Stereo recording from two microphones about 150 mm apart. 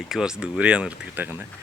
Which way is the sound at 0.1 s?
5° right (ahead or behind).